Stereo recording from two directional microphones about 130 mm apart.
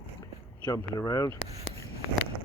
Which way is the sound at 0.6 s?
25° left (ahead or behind).